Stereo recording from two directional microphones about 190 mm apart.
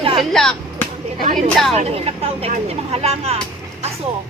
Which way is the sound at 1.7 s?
30° right (ahead or behind).